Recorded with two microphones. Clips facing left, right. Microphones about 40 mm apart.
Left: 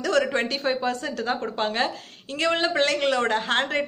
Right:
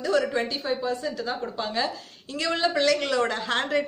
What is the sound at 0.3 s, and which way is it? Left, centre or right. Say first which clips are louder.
A woman's voice: left 2 dB; left.